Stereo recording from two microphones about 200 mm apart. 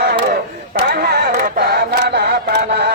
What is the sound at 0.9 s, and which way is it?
Chant, 50° right (ahead or behind).